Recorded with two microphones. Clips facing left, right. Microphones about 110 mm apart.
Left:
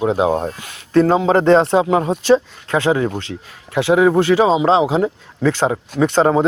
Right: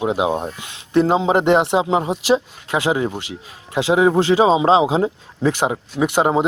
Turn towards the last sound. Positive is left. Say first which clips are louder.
# left 3 dB
turn(degrees=-15)  # may be behind; listen again after turning